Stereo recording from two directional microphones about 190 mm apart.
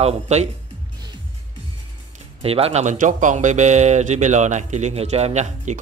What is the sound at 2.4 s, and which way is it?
Speech, 30° right (ahead or behind).